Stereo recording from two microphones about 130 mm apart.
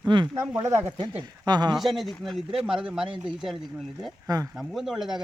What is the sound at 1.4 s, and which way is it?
Speech, 35° right (ahead or behind).